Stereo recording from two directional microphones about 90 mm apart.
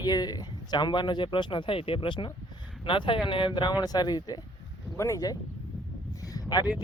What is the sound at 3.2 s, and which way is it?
Speech, 70° left (ahead or behind).